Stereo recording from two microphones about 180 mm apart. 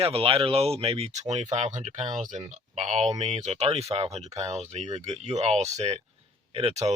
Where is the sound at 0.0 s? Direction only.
30° right (ahead or behind).